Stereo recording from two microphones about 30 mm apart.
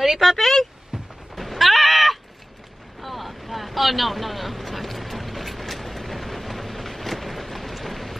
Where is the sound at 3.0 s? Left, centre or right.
Centre.